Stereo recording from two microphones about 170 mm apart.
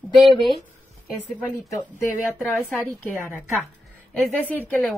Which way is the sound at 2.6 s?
Centre (ahead or behind).